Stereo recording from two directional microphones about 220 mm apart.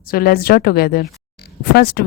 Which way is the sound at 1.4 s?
50° left (ahead or behind).